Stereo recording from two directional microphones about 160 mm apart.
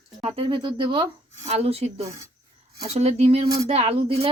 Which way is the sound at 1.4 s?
40° right (ahead or behind).